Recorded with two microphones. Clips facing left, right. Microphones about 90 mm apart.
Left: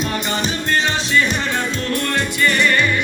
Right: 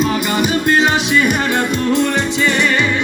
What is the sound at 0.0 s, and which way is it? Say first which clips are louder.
Music: right 6 dB; 5° right (ahead or behind).